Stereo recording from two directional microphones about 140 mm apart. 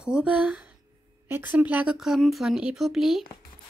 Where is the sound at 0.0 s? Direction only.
10° right (ahead or behind).